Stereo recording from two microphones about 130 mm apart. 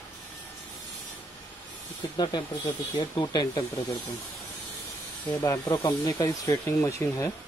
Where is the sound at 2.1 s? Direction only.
35° left (ahead or behind).